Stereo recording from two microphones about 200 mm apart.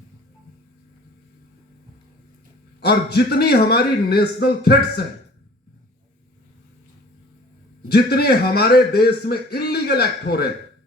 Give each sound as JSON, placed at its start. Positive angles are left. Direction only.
{"t": 2.8, "sound": "a man's voice", "side_deg": 55}
{"t": 7.9, "sound": "a man's voice", "side_deg": 50}